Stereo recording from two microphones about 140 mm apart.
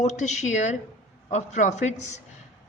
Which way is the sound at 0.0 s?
55° left (ahead or behind).